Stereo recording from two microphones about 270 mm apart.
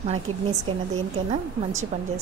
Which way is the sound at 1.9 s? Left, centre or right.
Right.